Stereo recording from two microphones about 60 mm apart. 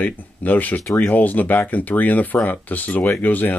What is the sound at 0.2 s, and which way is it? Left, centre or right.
Speech, left.